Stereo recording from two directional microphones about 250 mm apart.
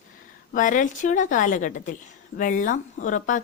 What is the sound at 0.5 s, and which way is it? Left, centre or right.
Speech, left.